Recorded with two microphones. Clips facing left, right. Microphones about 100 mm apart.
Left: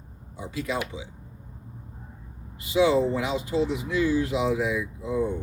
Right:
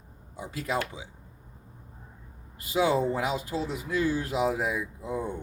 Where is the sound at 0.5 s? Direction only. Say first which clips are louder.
Left 1 dB; 40° right (ahead or behind).